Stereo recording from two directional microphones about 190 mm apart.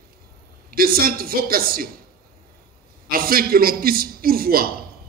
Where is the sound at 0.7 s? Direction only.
50° right (ahead or behind).